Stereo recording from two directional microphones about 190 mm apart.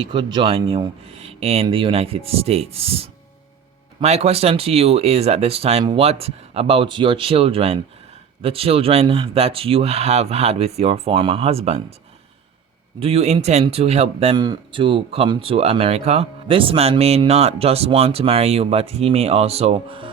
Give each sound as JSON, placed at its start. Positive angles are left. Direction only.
{"t": 0.0, "sound": "a man's voice", "side_deg": -25}
{"t": 13.0, "sound": "a man's voice", "side_deg": -30}